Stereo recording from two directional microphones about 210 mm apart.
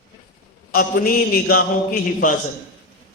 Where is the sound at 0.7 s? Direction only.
45° left (ahead or behind).